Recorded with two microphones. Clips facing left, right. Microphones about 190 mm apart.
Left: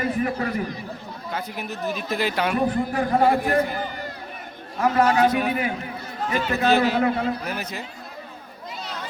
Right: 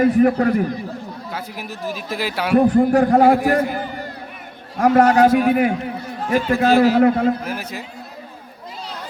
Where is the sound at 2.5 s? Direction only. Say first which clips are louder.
Right 9 dB; 50° right (ahead or behind).